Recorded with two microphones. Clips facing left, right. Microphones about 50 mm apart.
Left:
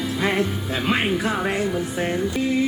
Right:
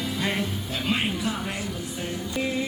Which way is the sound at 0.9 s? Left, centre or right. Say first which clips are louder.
Left 5 dB; left.